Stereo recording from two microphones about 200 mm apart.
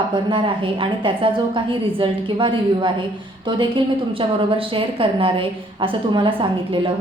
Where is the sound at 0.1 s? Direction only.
25° right (ahead or behind).